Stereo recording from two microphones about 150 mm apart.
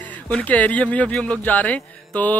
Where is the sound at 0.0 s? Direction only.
10° left (ahead or behind).